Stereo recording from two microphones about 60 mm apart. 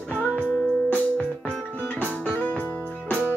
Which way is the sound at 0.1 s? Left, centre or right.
Left.